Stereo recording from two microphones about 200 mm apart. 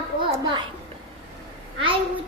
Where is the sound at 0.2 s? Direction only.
25° right (ahead or behind).